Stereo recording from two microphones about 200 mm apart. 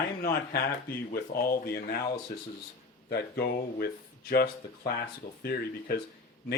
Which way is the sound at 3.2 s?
50° left (ahead or behind).